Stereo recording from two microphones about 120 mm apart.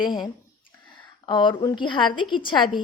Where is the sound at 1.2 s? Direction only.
40° left (ahead or behind).